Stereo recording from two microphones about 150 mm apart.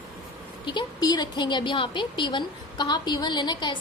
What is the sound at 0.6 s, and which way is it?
A woman's voice, 30° left (ahead or behind).